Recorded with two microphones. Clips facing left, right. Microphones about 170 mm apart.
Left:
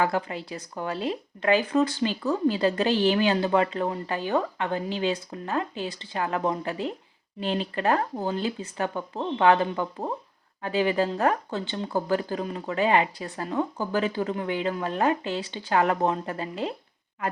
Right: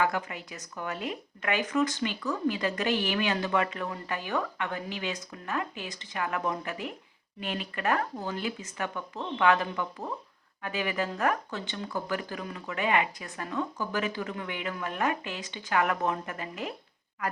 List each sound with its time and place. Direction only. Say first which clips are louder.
0.0 s speech: left 3 dB; 30° left (ahead or behind)